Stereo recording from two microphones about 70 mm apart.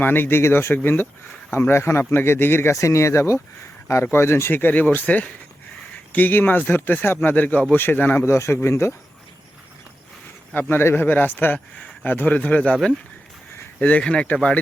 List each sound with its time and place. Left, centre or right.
0.0 s speech: left
2.7 s speech: left
8.2 s speech: left
10.5 s speech: left
13.7 s speech: centre